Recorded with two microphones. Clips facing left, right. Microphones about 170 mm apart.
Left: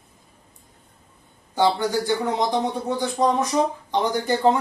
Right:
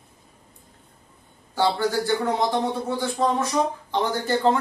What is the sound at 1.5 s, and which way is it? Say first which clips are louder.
Speech: left 2 dB; 15° left (ahead or behind).